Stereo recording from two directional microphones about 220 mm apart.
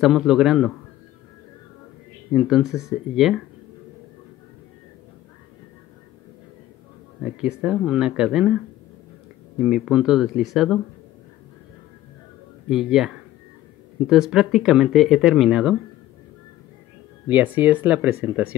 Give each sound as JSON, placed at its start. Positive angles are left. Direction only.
{"t": 0.0, "sound": "speech", "side_deg": 0}
{"t": 2.3, "sound": "speech", "side_deg": 0}
{"t": 7.2, "sound": "speech", "side_deg": -5}
{"t": 9.6, "sound": "speech", "side_deg": -5}
{"t": 12.6, "sound": "speech", "side_deg": 0}
{"t": 17.3, "sound": "speech", "side_deg": -5}